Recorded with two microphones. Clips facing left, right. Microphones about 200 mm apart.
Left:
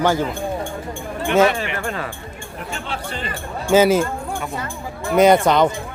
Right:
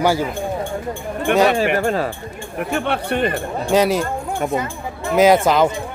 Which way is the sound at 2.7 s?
60° right (ahead or behind).